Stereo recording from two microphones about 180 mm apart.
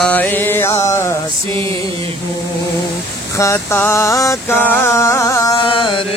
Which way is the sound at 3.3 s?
15° left (ahead or behind).